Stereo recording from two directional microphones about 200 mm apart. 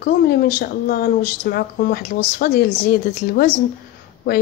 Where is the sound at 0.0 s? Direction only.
50° left (ahead or behind).